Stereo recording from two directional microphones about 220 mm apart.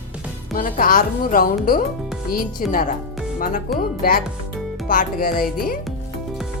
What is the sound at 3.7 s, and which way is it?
Speech, 40° left (ahead or behind).